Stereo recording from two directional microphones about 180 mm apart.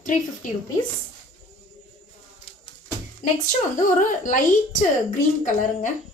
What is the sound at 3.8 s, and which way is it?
A woman's voice, 45° left (ahead or behind).